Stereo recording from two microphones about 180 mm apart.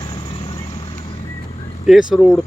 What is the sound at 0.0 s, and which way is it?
Vehicle, 25° left (ahead or behind).